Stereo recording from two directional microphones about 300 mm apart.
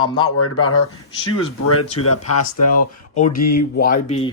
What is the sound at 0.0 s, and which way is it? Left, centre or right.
Speech, left.